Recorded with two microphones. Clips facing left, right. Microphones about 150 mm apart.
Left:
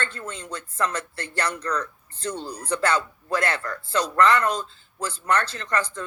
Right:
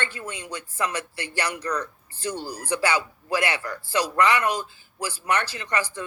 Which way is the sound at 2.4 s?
5° right (ahead or behind).